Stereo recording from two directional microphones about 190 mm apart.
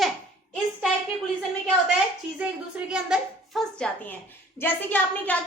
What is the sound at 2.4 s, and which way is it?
A woman's voice, 5° right (ahead or behind).